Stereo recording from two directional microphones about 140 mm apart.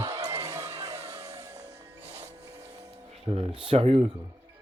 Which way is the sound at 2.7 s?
50° right (ahead or behind).